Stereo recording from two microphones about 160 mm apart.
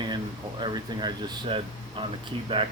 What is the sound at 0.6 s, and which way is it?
Speech, 30° right (ahead or behind).